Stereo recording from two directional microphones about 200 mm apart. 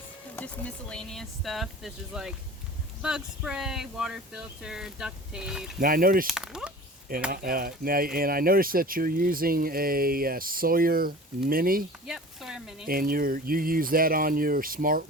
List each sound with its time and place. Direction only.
0.3 s speech: 5° left (ahead or behind)
5.8 s speech: 45° right (ahead or behind)
6.2 s speech: centre (ahead or behind)
7.3 s speech: 45° right (ahead or behind)
12.0 s speech: centre (ahead or behind)
12.9 s speech: 45° right (ahead or behind)